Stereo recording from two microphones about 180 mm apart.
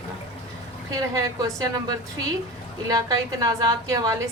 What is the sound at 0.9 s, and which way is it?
Speech, 20° right (ahead or behind).